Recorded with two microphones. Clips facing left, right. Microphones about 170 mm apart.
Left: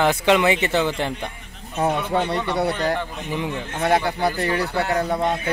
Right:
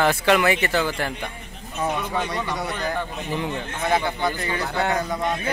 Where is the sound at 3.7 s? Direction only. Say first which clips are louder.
Left 3 dB; 35° left (ahead or behind).